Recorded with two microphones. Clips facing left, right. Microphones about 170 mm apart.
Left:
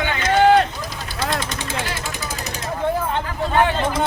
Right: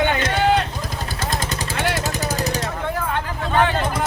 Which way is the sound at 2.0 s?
40° right (ahead or behind).